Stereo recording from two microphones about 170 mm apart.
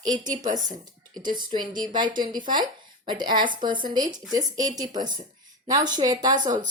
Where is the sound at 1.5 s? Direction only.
25° right (ahead or behind).